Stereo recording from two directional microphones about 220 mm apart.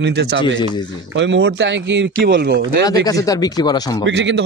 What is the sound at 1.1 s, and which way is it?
Speech, 55° right (ahead or behind).